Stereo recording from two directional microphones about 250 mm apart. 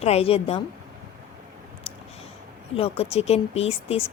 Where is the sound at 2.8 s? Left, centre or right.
Left.